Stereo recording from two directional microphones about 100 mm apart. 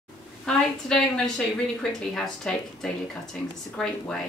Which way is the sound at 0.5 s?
5° left (ahead or behind).